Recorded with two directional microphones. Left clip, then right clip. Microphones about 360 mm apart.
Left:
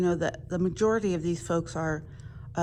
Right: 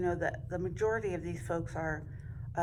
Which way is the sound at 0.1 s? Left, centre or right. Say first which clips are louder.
Left 5 dB; centre.